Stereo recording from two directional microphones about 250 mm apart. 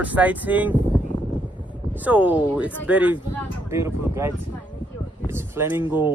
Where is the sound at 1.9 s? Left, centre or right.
Centre.